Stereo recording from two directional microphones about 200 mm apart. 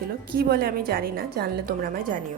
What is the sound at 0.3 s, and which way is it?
A woman's voice, 50° right (ahead or behind).